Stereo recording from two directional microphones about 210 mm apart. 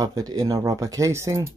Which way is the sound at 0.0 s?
15° right (ahead or behind).